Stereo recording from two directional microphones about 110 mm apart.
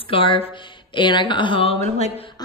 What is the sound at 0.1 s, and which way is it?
A woman's voice, 55° left (ahead or behind).